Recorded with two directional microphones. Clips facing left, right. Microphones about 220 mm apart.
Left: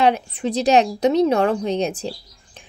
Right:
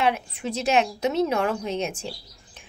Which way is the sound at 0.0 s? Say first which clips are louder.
Left 6 dB; 35° left (ahead or behind).